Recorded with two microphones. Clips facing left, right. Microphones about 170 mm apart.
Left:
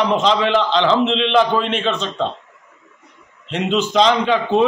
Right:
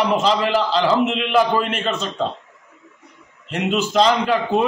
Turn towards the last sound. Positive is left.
turn(degrees=-5)  # may be behind; listen again after turning